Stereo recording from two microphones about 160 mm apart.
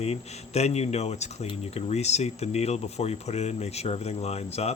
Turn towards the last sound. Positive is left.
turn(degrees=40)  # may be behind; listen again after turning